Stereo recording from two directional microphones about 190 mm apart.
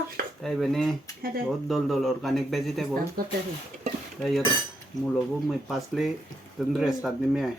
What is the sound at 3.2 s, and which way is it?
Speech, 50° right (ahead or behind).